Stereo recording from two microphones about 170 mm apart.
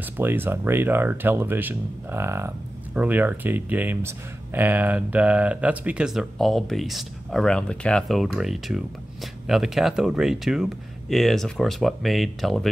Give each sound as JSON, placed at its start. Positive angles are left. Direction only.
{"t": 0.2, "sound": "speech", "side_deg": -15}